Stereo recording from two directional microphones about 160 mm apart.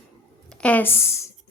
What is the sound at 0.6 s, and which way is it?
Speech, 10° left (ahead or behind).